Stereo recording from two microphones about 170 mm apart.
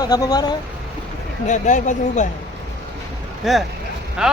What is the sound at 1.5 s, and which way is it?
Speech, 45° left (ahead or behind).